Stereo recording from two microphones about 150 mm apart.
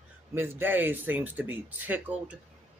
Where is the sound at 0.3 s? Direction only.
15° right (ahead or behind).